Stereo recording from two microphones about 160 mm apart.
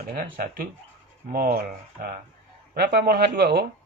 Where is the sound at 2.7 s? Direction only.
80° right.